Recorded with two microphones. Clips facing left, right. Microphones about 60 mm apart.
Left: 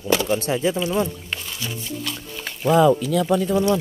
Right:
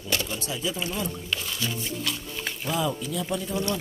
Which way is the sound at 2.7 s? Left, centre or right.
Left.